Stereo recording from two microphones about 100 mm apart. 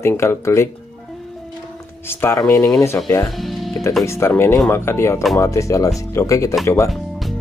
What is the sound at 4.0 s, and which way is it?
Speech, 25° left (ahead or behind).